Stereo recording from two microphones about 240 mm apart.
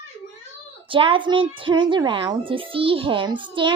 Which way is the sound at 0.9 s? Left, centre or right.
Right.